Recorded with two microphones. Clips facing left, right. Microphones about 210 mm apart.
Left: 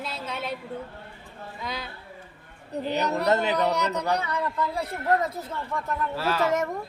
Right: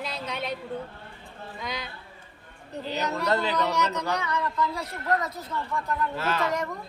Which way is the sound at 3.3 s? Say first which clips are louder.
Left 2 dB; 20° left (ahead or behind).